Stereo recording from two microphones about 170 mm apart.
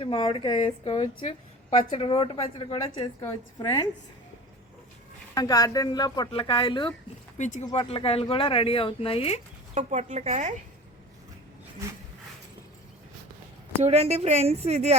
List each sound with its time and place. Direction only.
0.0 s speech: 30° left (ahead or behind)
5.3 s speech: 20° left (ahead or behind)
7.3 s speech: 45° left (ahead or behind)
7.6 s speech: 30° left (ahead or behind)
9.7 s a woman's voice: 45° right (ahead or behind)
13.8 s speech: 40° right (ahead or behind)